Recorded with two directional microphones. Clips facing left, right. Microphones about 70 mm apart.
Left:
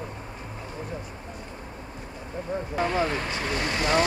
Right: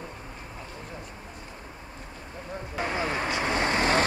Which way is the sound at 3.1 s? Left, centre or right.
Right.